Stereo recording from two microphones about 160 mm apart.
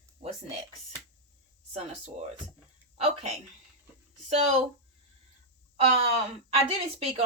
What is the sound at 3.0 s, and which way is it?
Speech, 40° right (ahead or behind).